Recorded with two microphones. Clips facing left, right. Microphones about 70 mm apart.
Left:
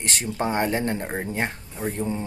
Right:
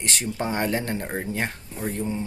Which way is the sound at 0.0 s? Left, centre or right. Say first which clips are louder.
Left 1 dB; left.